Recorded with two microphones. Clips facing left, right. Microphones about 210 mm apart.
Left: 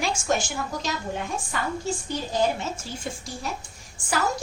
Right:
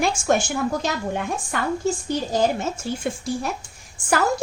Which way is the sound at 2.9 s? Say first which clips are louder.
Right 9 dB; 60° right (ahead or behind).